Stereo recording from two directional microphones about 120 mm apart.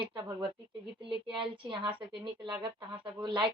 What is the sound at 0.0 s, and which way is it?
Child singing, 40° right (ahead or behind).